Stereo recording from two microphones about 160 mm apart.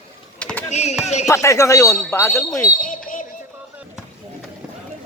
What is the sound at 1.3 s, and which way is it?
Speech, 20° left (ahead or behind).